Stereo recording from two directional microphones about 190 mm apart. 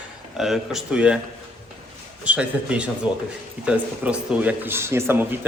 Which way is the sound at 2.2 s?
5° right (ahead or behind).